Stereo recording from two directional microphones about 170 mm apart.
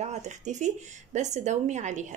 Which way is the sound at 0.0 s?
40° right (ahead or behind).